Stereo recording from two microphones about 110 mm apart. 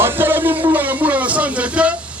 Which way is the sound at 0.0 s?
20° right (ahead or behind).